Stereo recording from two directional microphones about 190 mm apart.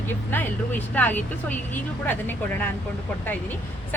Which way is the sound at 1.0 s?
10° left (ahead or behind).